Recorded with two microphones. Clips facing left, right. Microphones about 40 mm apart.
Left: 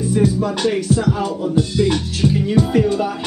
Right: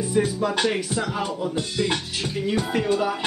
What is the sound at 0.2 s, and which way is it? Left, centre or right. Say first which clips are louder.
Music: left 4 dB; centre.